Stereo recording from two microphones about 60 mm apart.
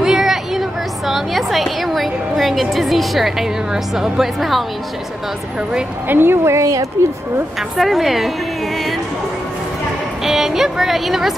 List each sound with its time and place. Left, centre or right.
0.0 s a sound: centre
6.0 s speech: right
6.6 s a woman's voice: right
7.7 s a woman's voice: centre
10.2 s speech: centre